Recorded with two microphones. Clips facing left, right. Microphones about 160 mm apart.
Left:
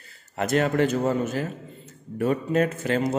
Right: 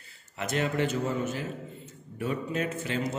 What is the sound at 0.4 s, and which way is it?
Speech, 50° left (ahead or behind).